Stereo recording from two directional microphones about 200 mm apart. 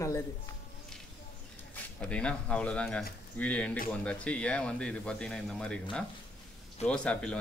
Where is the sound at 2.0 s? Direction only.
5° left (ahead or behind).